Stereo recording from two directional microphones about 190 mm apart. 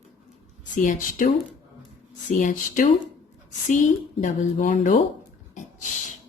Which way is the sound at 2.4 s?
45° left (ahead or behind).